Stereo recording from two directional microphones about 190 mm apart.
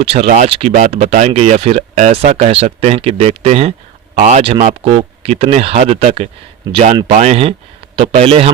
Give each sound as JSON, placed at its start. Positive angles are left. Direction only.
{"t": 0.0, "sound": "speech", "side_deg": -30}